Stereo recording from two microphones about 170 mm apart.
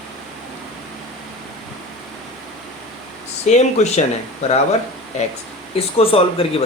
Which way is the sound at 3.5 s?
40° left (ahead or behind).